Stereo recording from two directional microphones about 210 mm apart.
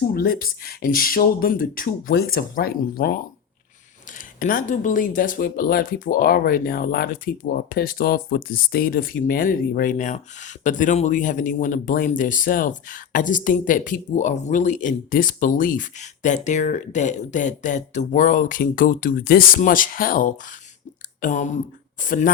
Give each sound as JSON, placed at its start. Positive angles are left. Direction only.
{"t": 0.1, "sound": "speech", "side_deg": 45}
{"t": 4.4, "sound": "speech", "side_deg": 40}